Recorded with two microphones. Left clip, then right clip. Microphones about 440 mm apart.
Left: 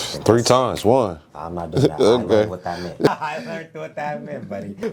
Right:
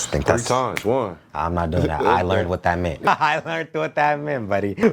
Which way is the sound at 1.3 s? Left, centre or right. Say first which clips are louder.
Right 6 dB; right.